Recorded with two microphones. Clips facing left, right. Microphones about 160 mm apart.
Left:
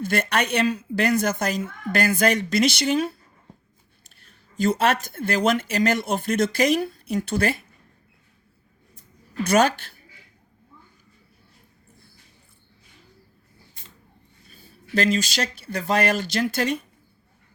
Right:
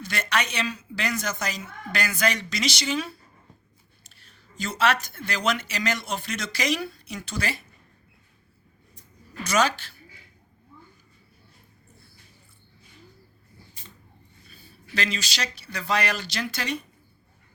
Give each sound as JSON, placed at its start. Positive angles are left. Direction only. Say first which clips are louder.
{"t": 0.0, "sound": "a woman's voice", "louder": "left 5 dB", "side_deg": 55}
{"t": 9.4, "sound": "a woman's voice", "louder": "left 5 dB", "side_deg": 55}
{"t": 14.5, "sound": "a woman's voice", "louder": "left 8 dB", "side_deg": 50}